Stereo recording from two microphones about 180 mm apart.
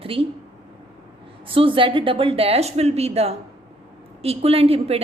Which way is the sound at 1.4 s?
30° right (ahead or behind).